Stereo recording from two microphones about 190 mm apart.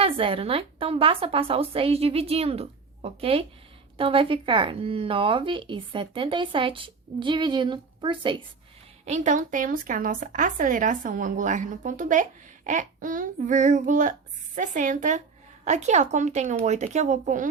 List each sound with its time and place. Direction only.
0.0 s a woman's voice: 30° right (ahead or behind)
9.0 s a woman's voice: 40° right (ahead or behind)